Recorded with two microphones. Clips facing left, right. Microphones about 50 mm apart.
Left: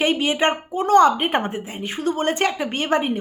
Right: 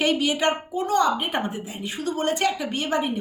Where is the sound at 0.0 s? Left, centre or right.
Left.